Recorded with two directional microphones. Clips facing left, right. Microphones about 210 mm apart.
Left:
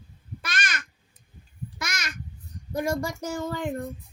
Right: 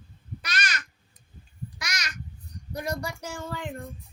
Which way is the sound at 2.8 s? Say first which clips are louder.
Left 5 dB; 45° left (ahead or behind).